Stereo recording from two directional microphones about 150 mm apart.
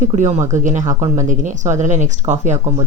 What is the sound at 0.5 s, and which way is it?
Speech, 55° right (ahead or behind).